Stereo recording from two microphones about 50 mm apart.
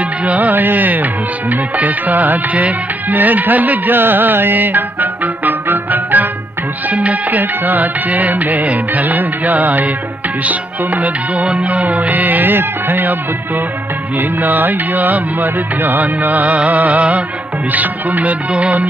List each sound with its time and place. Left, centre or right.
0.2 s music: right
4.6 s music: right
6.9 s music: right
14.1 s music: right